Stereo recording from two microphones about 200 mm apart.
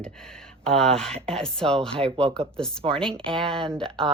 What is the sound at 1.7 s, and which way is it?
Speech, 30° right (ahead or behind).